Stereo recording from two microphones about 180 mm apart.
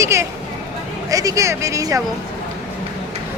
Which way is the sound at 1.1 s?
20° right (ahead or behind).